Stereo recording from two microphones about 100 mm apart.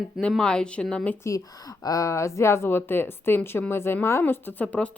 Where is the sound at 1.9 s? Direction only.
30° left (ahead or behind).